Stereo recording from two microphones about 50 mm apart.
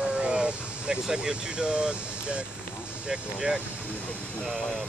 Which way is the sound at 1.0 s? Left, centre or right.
Centre.